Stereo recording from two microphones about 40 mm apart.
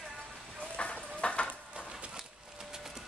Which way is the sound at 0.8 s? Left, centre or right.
Left.